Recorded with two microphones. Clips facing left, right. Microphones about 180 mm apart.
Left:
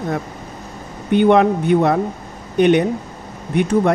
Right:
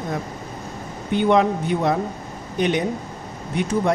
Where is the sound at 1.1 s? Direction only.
60° left (ahead or behind).